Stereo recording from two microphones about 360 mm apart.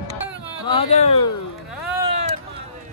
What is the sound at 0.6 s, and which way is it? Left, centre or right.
Speech, centre.